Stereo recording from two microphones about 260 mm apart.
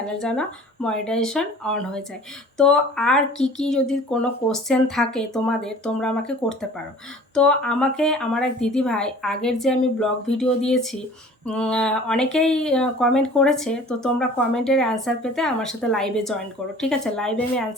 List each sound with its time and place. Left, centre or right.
0.0 s speech: centre